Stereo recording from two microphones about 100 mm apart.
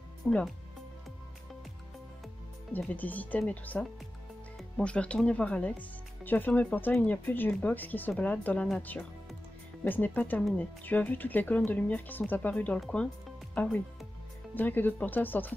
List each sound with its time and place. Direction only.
0.2 s speech: 15° left (ahead or behind)
2.7 s speech: 15° left (ahead or behind)
4.8 s speech: 10° left (ahead or behind)